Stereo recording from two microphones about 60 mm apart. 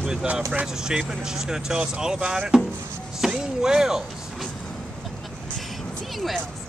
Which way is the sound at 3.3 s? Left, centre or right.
Centre.